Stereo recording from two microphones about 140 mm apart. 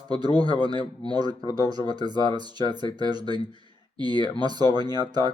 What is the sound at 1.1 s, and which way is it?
Speech, 30° right (ahead or behind).